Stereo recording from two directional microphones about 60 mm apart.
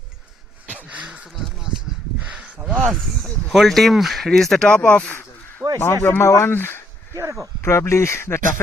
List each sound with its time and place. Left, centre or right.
2.2 s a sound: right
3.5 s speech: centre
4.7 s speech: left
5.6 s a sound: right
6.0 s speech: left
7.2 s speech: right
7.6 s speech: left